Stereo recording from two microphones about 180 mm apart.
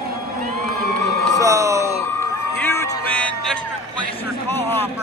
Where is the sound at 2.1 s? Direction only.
15° left (ahead or behind).